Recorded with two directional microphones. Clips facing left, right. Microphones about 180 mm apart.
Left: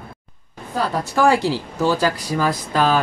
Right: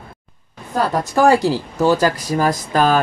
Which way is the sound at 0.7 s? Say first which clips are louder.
Right 3 dB; 45° right (ahead or behind).